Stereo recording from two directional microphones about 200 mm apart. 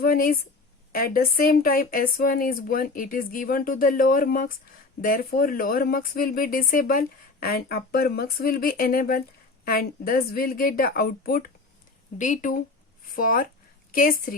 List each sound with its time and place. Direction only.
0.0 s speech: 45° left (ahead or behind)